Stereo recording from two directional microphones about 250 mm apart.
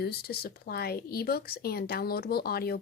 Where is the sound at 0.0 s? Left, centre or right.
Left.